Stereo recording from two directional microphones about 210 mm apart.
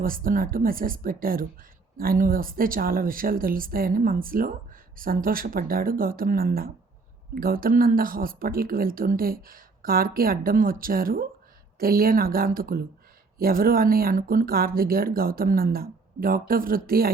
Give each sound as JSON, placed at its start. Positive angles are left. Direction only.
{"t": 0.0, "sound": "speech", "side_deg": -40}